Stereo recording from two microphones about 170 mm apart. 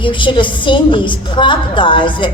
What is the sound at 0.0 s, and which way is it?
A woman's voice, 30° left (ahead or behind).